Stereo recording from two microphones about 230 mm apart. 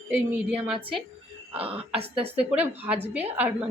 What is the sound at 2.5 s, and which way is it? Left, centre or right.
Speech, centre.